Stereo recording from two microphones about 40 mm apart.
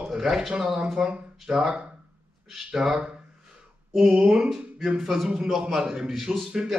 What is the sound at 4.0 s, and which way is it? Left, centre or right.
Speech, centre.